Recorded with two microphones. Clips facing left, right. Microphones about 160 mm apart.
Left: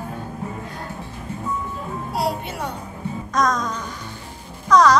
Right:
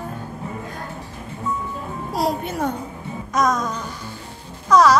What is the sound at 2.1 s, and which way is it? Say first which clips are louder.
Speech: right 3 dB; 45° right (ahead or behind).